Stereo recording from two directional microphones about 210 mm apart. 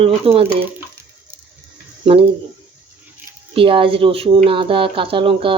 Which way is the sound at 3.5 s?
25° right (ahead or behind).